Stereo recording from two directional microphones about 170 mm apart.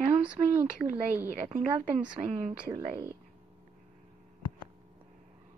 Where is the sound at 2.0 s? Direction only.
40° right (ahead or behind).